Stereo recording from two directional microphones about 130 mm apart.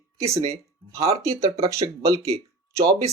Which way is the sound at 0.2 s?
25° right (ahead or behind).